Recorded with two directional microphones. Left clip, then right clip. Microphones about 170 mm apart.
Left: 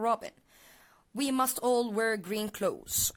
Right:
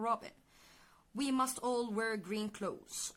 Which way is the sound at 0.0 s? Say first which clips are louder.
Left 6 dB; 45° left (ahead or behind).